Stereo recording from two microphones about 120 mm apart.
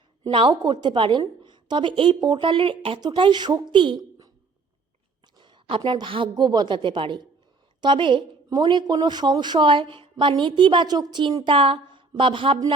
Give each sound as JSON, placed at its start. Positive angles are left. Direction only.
{"t": 0.3, "sound": "a woman's voice", "side_deg": -45}
{"t": 5.4, "sound": "a woman's voice", "side_deg": -45}